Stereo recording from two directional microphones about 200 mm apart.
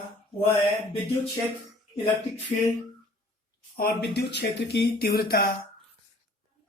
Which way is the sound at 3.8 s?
50° left (ahead or behind).